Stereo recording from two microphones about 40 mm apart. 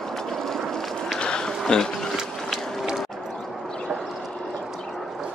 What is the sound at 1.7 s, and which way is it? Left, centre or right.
Speech, centre.